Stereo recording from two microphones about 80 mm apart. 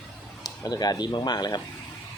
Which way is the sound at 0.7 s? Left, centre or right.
Left.